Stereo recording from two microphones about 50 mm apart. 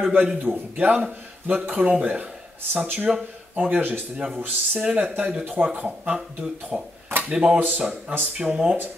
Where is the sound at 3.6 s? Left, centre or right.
Right.